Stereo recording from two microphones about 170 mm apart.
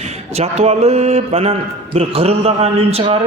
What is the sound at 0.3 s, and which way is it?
A man's voice, 40° right (ahead or behind).